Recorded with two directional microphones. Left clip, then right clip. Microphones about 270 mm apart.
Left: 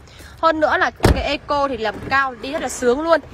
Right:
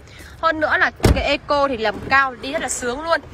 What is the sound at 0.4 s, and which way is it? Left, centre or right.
Speech, centre.